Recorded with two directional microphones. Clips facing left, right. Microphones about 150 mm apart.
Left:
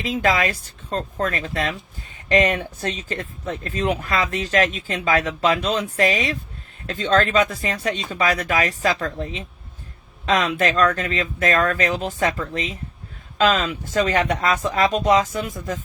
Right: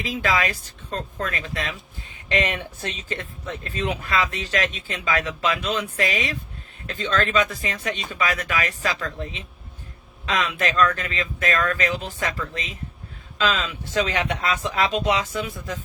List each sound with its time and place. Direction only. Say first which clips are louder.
0.2 s speech: left 3 dB; 40° left (ahead or behind)